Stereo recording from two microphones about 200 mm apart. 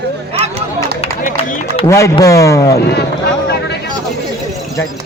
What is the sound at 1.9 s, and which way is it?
Speech, 15° left (ahead or behind).